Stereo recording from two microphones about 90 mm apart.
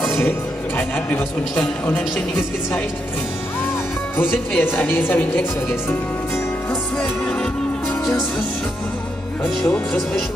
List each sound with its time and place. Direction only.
0.7 s music: 25° left (ahead or behind)
4.6 s a woman's voice: 25° left (ahead or behind)
7.0 s music: 10° left (ahead or behind)
9.4 s speech: 10° left (ahead or behind)